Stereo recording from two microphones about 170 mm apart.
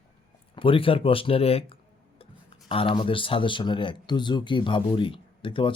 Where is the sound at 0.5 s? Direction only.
30° left (ahead or behind).